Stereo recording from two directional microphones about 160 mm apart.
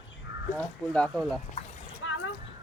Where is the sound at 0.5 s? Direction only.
5° left (ahead or behind).